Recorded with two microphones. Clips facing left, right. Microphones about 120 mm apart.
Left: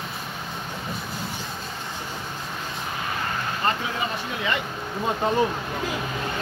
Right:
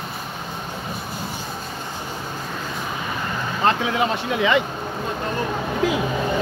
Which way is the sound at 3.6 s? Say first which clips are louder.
Right 8 dB; 85° right.